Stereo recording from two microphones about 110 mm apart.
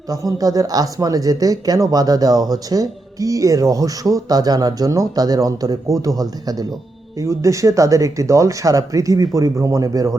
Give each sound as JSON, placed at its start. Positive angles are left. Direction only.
{"t": 0.1, "sound": "speech", "side_deg": -35}